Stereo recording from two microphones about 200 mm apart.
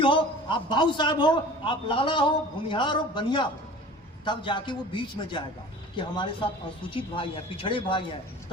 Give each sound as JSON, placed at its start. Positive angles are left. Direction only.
{"t": 0.0, "sound": "a man's voice", "side_deg": 25}